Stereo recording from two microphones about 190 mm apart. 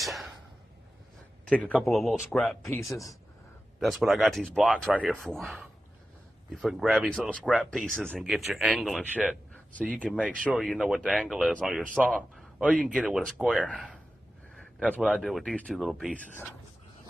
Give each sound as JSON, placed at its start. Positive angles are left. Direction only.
{"t": 0.0, "sound": "a sound", "side_deg": 0}
{"t": 1.5, "sound": "speech", "side_deg": 5}
{"t": 2.9, "sound": "speech", "side_deg": 15}
{"t": 3.8, "sound": "speech", "side_deg": 0}